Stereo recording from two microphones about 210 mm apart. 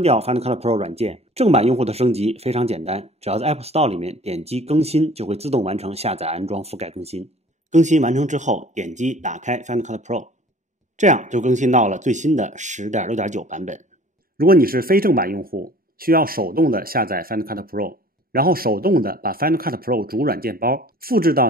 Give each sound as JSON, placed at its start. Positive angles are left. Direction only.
{"t": 0.0, "sound": "speech", "side_deg": -30}